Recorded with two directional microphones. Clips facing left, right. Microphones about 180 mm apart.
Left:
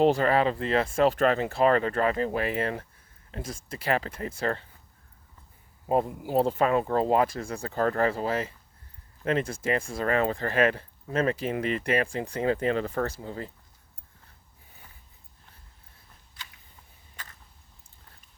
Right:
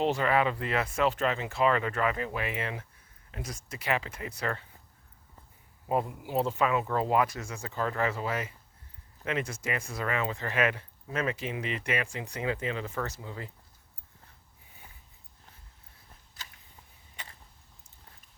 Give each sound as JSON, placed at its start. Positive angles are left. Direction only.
{"t": 0.0, "sound": "speech", "side_deg": 35}
{"t": 3.3, "sound": "speech", "side_deg": 30}
{"t": 5.9, "sound": "speech", "side_deg": 35}
{"t": 12.5, "sound": "speech", "side_deg": 50}
{"t": 13.0, "sound": "speech", "side_deg": 35}